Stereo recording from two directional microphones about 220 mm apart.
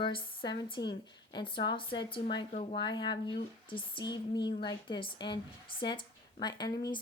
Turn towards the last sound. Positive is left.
turn(degrees=15)  # may be behind; listen again after turning